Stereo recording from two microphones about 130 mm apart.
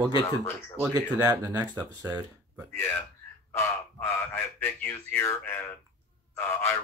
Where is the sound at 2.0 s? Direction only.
15° right (ahead or behind).